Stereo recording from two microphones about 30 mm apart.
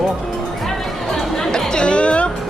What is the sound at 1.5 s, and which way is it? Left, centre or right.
Music, left.